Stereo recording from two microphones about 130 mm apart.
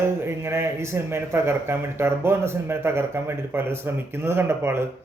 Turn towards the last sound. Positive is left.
turn(degrees=-20)  # may be behind; listen again after turning